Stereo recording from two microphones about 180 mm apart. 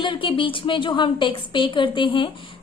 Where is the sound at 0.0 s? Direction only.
25° left (ahead or behind).